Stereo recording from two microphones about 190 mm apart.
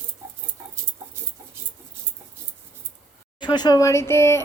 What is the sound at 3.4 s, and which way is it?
Speech, 20° left (ahead or behind).